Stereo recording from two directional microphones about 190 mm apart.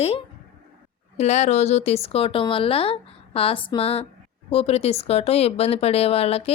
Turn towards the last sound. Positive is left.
turn(degrees=30)  # may be behind; listen again after turning